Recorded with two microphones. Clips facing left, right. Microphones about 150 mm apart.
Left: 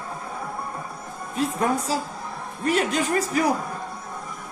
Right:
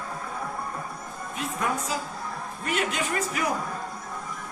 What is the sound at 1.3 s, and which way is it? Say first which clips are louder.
A woman's voice: left 6 dB; 35° left (ahead or behind).